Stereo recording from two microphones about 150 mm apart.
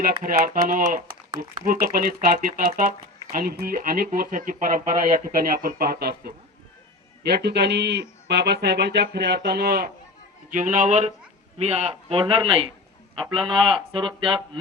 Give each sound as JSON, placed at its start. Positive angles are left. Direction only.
{"t": 0.0, "sound": "speech", "side_deg": -75}
{"t": 5.4, "sound": "speech", "side_deg": -75}
{"t": 10.5, "sound": "a man's voice", "side_deg": -60}